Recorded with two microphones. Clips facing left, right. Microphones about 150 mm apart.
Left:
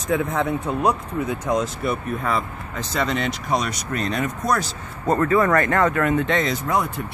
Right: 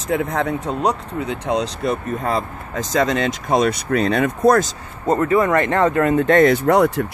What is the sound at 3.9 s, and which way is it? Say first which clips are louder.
Speech: right 7 dB; 65° right (ahead or behind).